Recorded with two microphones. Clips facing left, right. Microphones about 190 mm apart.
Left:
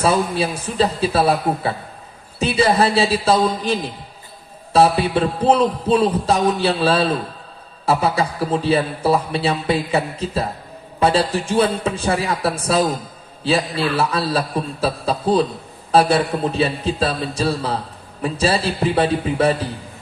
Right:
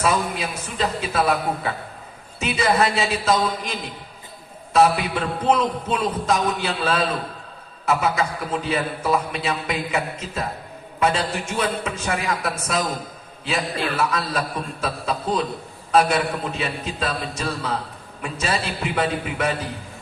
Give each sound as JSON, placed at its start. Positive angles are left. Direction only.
{"t": 0.0, "sound": "a man's voice", "side_deg": 30}